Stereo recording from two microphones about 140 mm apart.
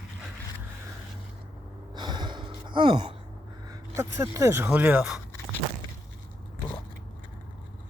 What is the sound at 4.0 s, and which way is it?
Speech, 20° right (ahead or behind).